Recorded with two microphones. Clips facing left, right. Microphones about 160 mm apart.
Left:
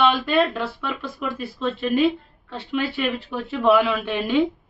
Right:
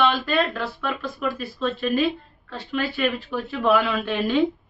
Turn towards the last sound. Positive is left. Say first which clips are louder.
# left 1 dB
turn(degrees=10)  # may be behind; listen again after turning